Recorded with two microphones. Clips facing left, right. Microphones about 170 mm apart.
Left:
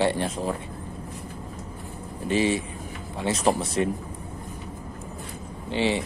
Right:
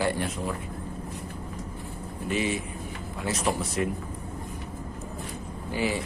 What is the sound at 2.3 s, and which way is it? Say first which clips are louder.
Speech: left 5 dB; 30° left (ahead or behind).